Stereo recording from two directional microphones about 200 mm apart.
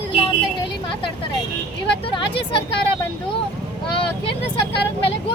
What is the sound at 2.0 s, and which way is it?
Speech, 25° left (ahead or behind).